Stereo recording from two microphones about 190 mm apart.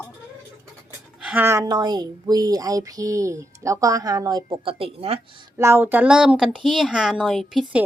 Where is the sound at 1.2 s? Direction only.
10° right (ahead or behind).